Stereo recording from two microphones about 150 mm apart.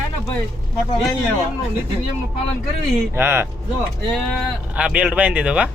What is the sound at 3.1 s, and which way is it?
Speech, 15° right (ahead or behind).